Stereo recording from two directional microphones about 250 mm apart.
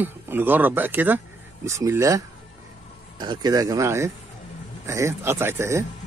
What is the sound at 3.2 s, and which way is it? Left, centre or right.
Speech, centre.